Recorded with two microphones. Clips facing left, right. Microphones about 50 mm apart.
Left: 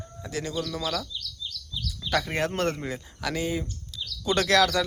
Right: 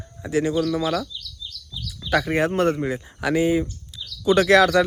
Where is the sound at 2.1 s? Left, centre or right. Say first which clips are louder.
Right 6 dB; centre.